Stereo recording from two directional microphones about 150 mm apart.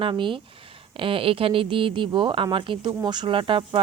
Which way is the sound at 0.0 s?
35° right (ahead or behind).